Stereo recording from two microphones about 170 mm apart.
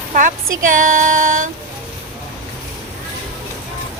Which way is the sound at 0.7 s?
50° right (ahead or behind).